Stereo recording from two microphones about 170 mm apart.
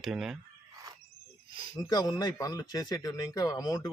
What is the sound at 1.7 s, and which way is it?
Speech, 20° left (ahead or behind).